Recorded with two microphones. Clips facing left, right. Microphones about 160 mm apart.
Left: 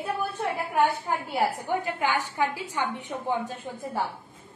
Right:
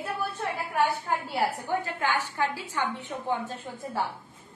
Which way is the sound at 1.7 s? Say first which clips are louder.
Left 2 dB; 15° left (ahead or behind).